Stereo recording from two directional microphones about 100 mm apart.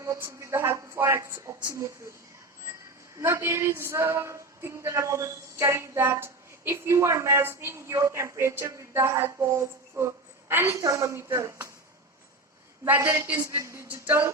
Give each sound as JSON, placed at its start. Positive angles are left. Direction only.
{"t": 0.0, "sound": "speech", "side_deg": -30}
{"t": 3.2, "sound": "a woman's voice", "side_deg": -25}
{"t": 10.8, "sound": "speech", "side_deg": -35}
{"t": 12.8, "sound": "speech", "side_deg": -25}
{"t": 13.8, "sound": "speech", "side_deg": -15}